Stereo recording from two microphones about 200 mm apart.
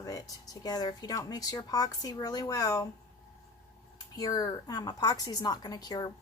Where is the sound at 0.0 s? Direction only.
15° left (ahead or behind).